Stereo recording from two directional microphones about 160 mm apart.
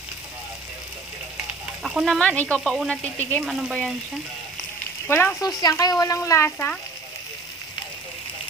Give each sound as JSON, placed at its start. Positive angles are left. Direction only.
{"t": 1.8, "sound": "speech", "side_deg": 0}
{"t": 5.0, "sound": "speech", "side_deg": 15}
{"t": 5.6, "sound": "speech", "side_deg": 25}